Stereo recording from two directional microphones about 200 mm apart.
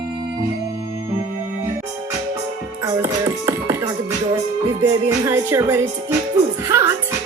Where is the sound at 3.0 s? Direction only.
15° right (ahead or behind).